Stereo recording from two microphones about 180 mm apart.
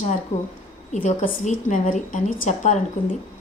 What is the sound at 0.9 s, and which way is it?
A woman's voice, 40° left (ahead or behind).